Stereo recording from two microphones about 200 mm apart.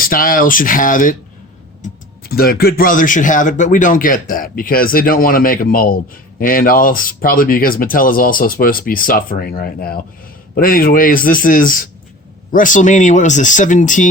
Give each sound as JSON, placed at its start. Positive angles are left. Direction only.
{"t": 0.0, "sound": "speech", "side_deg": 45}
{"t": 2.3, "sound": "speech", "side_deg": 50}